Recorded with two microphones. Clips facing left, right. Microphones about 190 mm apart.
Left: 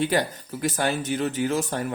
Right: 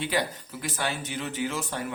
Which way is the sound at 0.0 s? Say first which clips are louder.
Left 5 dB; 45° left (ahead or behind).